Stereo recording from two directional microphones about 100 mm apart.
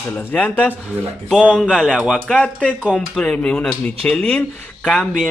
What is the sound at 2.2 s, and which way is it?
Speech, 5° left (ahead or behind).